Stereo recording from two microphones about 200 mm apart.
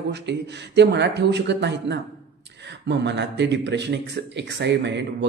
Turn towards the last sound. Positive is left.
turn(degrees=-60)  # may be behind; listen again after turning